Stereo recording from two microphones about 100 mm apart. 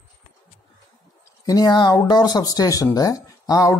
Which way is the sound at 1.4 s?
35° left (ahead or behind).